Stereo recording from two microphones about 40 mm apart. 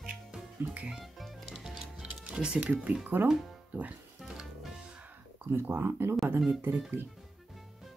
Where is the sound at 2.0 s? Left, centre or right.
Right.